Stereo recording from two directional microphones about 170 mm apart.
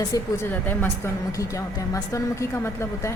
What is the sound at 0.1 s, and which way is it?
Speech, 20° left (ahead or behind).